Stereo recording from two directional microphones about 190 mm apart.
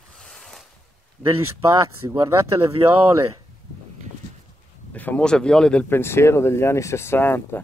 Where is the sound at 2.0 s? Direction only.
15° right (ahead or behind).